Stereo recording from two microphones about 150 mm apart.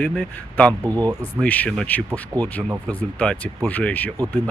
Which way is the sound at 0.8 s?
25° right (ahead or behind).